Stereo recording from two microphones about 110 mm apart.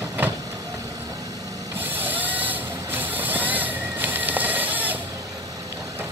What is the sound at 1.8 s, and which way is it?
Vehicle, 15° right (ahead or behind).